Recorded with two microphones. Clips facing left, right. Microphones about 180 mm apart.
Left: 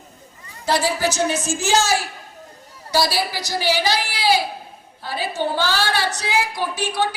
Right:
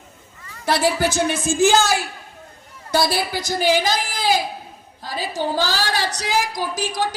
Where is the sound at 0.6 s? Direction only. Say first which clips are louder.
Right 1 dB; 55° right (ahead or behind).